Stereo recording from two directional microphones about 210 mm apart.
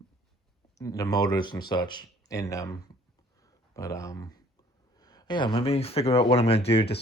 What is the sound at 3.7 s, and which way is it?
Speech, 15° left (ahead or behind).